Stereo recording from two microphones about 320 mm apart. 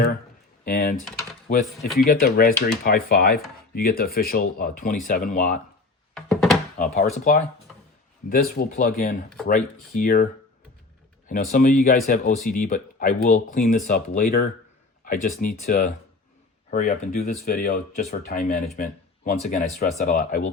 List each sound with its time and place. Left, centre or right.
0.6 s speech: left
6.1 s thunk: centre
6.7 s speech: left
8.3 s speech: left
11.3 s speech: left